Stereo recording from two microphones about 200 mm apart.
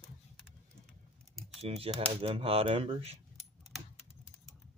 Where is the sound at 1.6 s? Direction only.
30° right (ahead or behind).